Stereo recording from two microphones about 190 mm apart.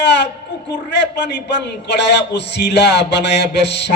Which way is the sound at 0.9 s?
65° left (ahead or behind).